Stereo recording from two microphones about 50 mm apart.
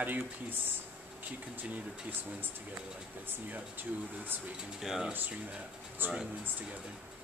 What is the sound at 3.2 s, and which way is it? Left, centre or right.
Speech, right.